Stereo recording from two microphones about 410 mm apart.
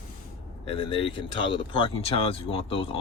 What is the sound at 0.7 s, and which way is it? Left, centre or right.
Speech, centre.